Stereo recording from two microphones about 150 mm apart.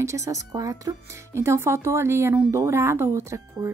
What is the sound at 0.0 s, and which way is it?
Speech, 20° right (ahead or behind).